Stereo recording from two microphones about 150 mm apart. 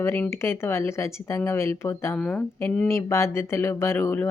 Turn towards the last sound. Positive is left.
turn(degrees=15)  # may be behind; listen again after turning